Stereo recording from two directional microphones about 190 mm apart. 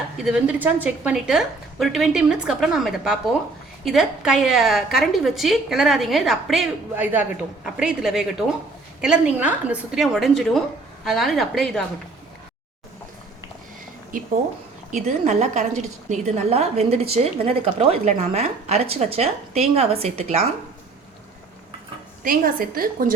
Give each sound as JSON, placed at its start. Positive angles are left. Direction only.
{"t": 0.2, "sound": "a woman's voice", "side_deg": -5}
{"t": 14.9, "sound": "a woman's voice", "side_deg": -35}
{"t": 22.2, "sound": "a woman's voice", "side_deg": -50}